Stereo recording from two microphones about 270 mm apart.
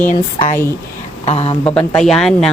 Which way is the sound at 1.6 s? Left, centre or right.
Centre.